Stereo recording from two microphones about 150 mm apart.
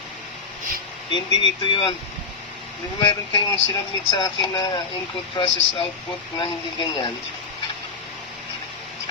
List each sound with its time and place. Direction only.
1.1 s speech: 30° left (ahead or behind)
3.0 s speech: 30° left (ahead or behind)